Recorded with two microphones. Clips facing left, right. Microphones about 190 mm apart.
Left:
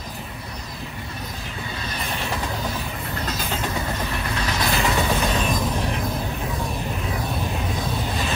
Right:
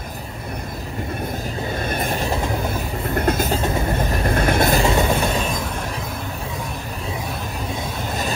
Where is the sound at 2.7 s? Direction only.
55° right (ahead or behind).